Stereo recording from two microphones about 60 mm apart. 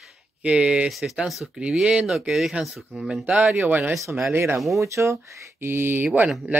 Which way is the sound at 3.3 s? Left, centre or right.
Centre.